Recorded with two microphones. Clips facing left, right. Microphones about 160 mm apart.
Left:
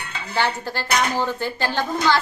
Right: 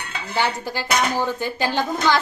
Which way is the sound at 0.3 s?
15° right (ahead or behind).